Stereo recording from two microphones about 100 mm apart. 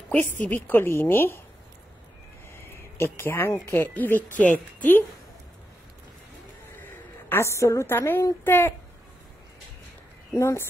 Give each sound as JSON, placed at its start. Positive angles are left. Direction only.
{"t": 0.1, "sound": "a woman's voice", "side_deg": 15}
{"t": 2.5, "sound": "a sound", "side_deg": 25}
{"t": 3.7, "sound": "a woman's voice", "side_deg": 20}
{"t": 7.2, "sound": "a woman's voice", "side_deg": 25}
{"t": 10.3, "sound": "a woman's voice", "side_deg": 25}